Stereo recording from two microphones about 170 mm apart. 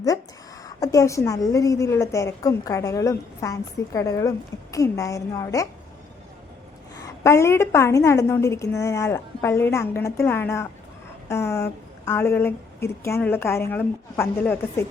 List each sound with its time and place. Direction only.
0.6 s a woman's voice: 20° left (ahead or behind)
6.9 s a woman's voice: 20° left (ahead or behind)